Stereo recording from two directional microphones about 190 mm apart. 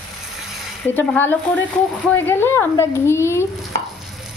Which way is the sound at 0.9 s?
10° left (ahead or behind).